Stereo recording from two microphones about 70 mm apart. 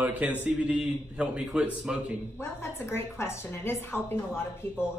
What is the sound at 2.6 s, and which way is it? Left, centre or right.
A woman's voice, left.